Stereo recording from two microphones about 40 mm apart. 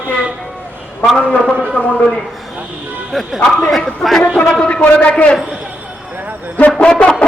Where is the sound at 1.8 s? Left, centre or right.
Left.